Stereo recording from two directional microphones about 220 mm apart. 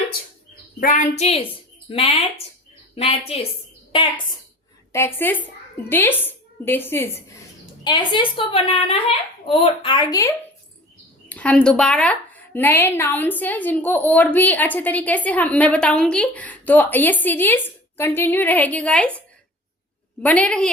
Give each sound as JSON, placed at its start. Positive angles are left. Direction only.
{"t": 0.8, "sound": "a woman's voice", "side_deg": 35}
{"t": 4.9, "sound": "a woman's voice", "side_deg": 10}
{"t": 7.9, "sound": "a woman's voice", "side_deg": 20}
{"t": 20.2, "sound": "speech", "side_deg": 5}